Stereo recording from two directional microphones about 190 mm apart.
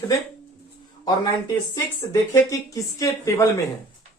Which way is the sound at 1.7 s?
15° left (ahead or behind).